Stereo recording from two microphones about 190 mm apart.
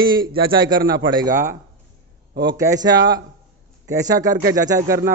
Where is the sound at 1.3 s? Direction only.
45° right (ahead or behind).